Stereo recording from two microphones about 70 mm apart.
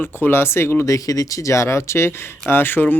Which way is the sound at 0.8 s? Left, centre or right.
Left.